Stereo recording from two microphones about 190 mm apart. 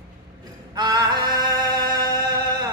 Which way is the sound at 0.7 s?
25° right (ahead or behind).